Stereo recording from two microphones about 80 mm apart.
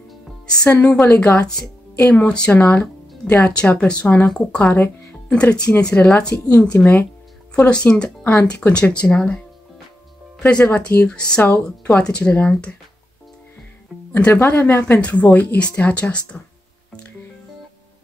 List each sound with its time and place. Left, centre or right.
0.8 s speech: centre
4.7 s speech: left
5.7 s speech: centre
10.4 s speech: centre
14.1 s speech: centre